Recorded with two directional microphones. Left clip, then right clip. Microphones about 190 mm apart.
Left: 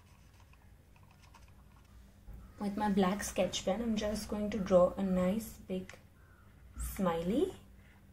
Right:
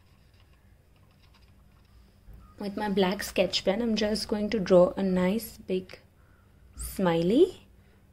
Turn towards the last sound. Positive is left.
turn(degrees=-50)  # may be behind; listen again after turning